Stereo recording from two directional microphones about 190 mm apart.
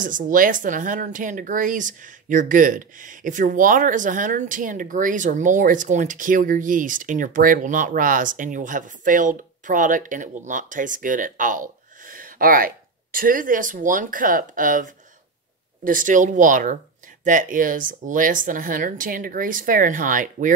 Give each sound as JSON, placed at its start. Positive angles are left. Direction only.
{"t": 0.0, "sound": "speech", "side_deg": -45}